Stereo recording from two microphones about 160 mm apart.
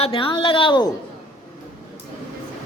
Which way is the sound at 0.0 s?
35° left (ahead or behind).